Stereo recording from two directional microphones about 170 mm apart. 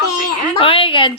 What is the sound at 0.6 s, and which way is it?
Speech, 35° left (ahead or behind).